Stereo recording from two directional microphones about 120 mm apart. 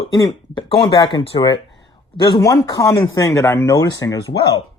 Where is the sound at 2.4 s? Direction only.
25° left (ahead or behind).